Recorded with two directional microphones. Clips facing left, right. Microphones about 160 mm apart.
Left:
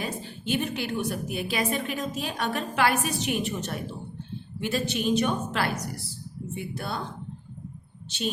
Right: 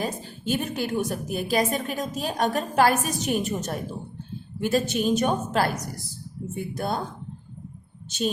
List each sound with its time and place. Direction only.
0.0 s a woman's voice: 40° right (ahead or behind)
8.1 s a woman's voice: 45° right (ahead or behind)